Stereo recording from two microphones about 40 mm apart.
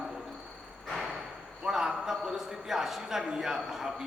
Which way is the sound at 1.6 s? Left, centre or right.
Centre.